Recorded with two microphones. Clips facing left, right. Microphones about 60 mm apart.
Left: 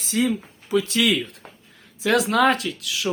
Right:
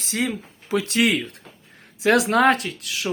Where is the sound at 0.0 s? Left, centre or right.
Right.